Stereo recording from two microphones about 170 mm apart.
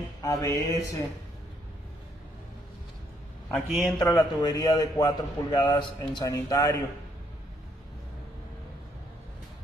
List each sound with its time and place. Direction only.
0.2 s music: 20° left (ahead or behind)
0.7 s a man's voice: 20° left (ahead or behind)
3.4 s a man's voice: centre (ahead or behind)
4.2 s a man's voice: 25° left (ahead or behind)